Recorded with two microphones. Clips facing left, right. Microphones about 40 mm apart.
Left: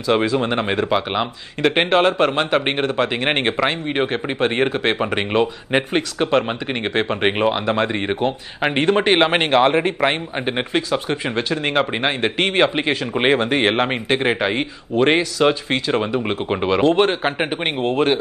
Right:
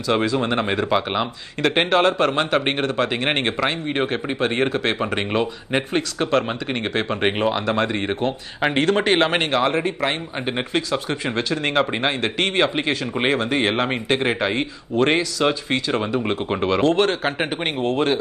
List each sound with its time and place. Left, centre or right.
0.1 s speech: centre
0.8 s a man's voice: centre
1.9 s speech: left
2.3 s a man's voice: centre
13.4 s a man's voice: left; by 17.5 s centre